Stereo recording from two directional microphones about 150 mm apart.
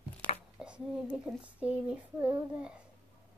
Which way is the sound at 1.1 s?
5° right (ahead or behind).